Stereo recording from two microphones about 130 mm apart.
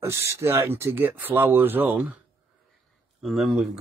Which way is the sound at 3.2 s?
Centre (ahead or behind).